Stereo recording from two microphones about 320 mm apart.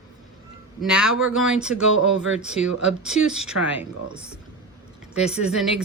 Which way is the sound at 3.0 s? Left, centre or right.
Centre.